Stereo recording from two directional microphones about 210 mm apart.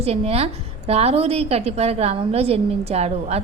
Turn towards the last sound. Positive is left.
turn(degrees=-30)  # may be behind; listen again after turning